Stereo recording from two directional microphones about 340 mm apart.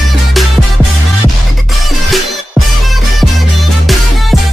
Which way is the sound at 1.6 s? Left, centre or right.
Centre.